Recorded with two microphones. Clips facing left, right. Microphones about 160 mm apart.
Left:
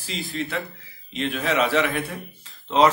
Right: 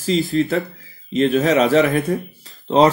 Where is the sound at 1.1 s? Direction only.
40° right (ahead or behind).